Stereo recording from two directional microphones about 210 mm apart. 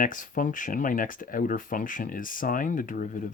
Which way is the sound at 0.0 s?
40° left (ahead or behind).